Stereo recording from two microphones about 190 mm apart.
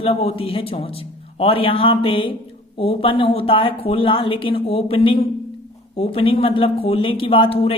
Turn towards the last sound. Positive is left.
turn(degrees=30)  # may be behind; listen again after turning